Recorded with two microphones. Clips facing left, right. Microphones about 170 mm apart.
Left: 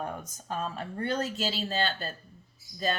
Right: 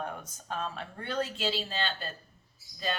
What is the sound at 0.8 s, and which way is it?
A woman's voice, 40° left (ahead or behind).